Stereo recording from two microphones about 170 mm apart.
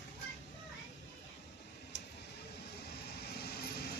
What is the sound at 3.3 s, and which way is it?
Vehicle, 70° left (ahead or behind).